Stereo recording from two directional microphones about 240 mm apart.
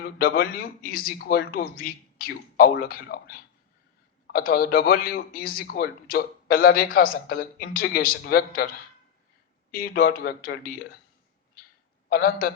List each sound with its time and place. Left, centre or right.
0.0 s a man's voice: left
9.8 s a man's voice: left
12.0 s a man's voice: left